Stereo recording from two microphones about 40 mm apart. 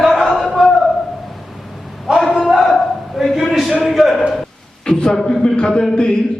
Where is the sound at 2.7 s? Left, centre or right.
Centre.